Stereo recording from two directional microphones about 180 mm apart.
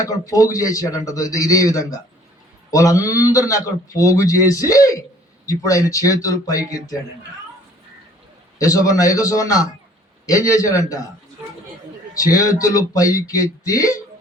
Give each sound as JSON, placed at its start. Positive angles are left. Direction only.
{"t": 0.0, "sound": "a man's voice", "side_deg": 20}
{"t": 8.5, "sound": "a man's voice", "side_deg": 20}
{"t": 12.1, "sound": "a man's voice", "side_deg": 20}